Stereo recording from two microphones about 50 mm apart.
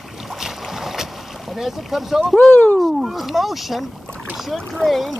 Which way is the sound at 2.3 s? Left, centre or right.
Left.